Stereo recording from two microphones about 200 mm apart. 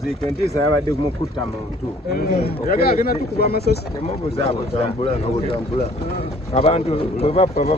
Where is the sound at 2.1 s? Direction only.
50° left (ahead or behind).